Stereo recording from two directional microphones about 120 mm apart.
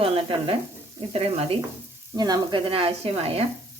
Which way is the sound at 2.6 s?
50° right (ahead or behind).